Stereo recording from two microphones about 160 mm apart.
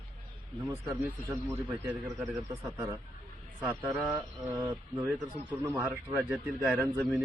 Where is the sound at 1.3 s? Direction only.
10° right (ahead or behind).